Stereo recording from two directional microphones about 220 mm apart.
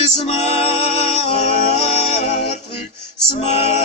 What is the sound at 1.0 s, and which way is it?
Music, 30° left (ahead or behind).